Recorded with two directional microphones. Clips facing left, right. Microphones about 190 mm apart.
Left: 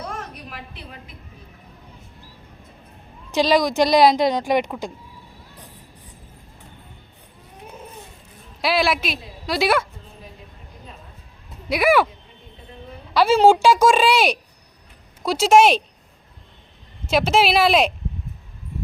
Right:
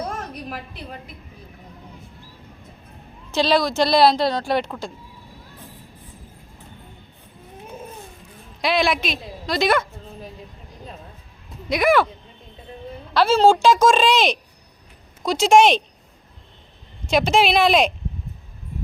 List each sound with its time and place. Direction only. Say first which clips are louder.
0.5 s a woman's voice: right 4 dB; 40° right (ahead or behind)
3.3 s a woman's voice: left 1 dB; 15° left (ahead or behind)
8.6 s a woman's voice: even; 5° left (ahead or behind)
11.7 s a woman's voice: even; 10° left (ahead or behind)
13.1 s a woman's voice: left 1 dB; 15° left (ahead or behind)
17.1 s a woman's voice: even; 5° left (ahead or behind)